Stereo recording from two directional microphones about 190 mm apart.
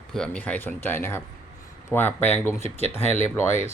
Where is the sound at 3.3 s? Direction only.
15° left (ahead or behind).